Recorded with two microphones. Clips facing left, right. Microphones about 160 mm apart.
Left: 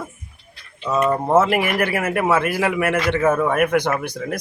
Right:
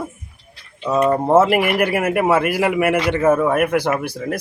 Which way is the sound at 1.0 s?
30° right (ahead or behind).